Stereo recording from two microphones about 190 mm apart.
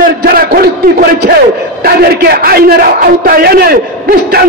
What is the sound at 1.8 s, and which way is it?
A man's voice, 55° right (ahead or behind).